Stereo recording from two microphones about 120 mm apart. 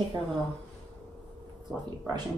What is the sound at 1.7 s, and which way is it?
Speech, 10° right (ahead or behind).